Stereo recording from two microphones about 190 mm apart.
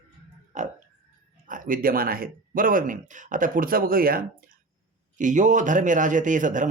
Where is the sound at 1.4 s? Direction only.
45° right (ahead or behind).